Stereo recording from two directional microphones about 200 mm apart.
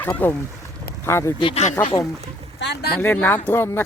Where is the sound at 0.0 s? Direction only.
10° left (ahead or behind).